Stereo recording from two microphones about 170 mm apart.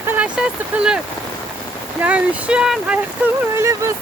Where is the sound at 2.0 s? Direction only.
10° right (ahead or behind).